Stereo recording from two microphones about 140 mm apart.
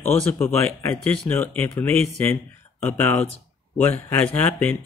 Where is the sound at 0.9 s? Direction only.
5° left (ahead or behind).